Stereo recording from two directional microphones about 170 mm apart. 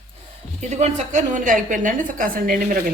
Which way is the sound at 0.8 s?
50° right (ahead or behind).